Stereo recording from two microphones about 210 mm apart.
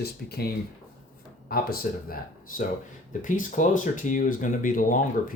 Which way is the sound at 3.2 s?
40° left (ahead or behind).